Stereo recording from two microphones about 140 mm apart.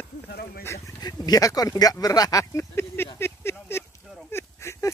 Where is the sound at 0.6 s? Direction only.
25° left (ahead or behind).